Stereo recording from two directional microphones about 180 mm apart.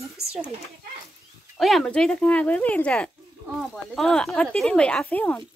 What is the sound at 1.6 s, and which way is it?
Speech, centre (ahead or behind).